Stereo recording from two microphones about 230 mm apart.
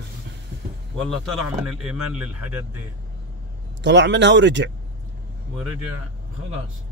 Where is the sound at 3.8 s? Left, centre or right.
Right.